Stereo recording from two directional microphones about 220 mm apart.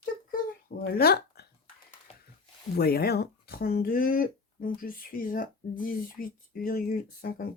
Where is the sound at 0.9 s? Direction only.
45° left (ahead or behind).